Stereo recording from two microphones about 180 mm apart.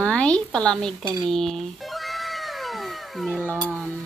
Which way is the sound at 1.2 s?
5° left (ahead or behind).